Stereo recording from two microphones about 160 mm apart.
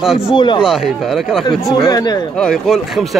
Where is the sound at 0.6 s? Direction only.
5° right (ahead or behind).